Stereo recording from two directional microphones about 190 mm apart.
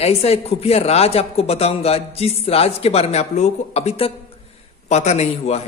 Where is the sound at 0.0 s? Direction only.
35° left (ahead or behind).